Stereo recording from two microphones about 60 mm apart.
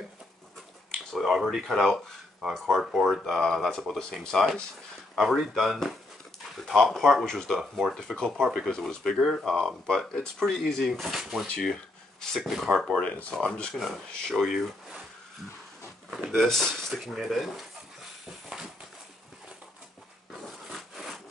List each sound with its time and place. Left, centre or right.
1.1 s speech: centre
5.1 s speech: centre
12.9 s speech: centre
13.7 s speech: centre
16.1 s a sound: centre
16.3 s speech: centre
20.4 s wood: centre